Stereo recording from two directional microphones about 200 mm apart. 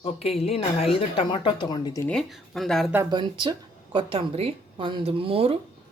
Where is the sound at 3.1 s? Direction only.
25° right (ahead or behind).